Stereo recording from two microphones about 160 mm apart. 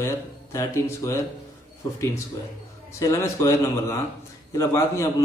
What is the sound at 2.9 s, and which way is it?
Speech, 20° left (ahead or behind).